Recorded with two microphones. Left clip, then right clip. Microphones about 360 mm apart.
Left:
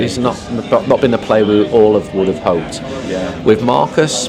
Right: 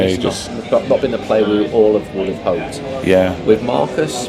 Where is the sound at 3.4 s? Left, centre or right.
Left.